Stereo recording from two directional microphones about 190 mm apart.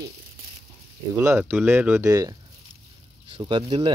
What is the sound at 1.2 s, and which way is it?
Speech, 10° right (ahead or behind).